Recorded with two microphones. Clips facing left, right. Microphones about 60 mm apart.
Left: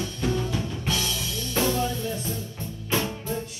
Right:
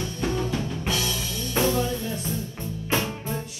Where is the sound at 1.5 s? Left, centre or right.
Centre.